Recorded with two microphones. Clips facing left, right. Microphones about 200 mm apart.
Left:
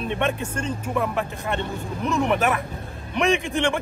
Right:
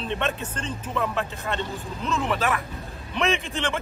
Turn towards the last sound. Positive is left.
turn(degrees=15)  # may be behind; listen again after turning